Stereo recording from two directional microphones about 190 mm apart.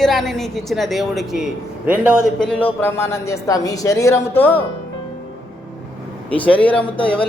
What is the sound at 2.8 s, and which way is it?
A woman's voice, 15° left (ahead or behind).